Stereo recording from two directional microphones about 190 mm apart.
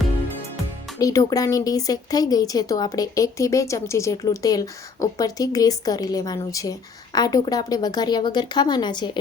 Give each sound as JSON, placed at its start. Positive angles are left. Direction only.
{"t": 0.9, "sound": "speech", "side_deg": 20}